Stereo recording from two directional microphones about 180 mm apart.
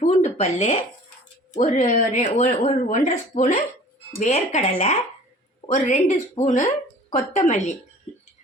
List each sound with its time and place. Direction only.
0.0 s a woman's voice: 40° left (ahead or behind)
5.7 s a woman's voice: 40° left (ahead or behind)